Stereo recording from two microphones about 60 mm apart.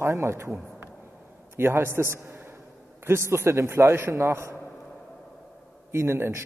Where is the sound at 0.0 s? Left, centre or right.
Right.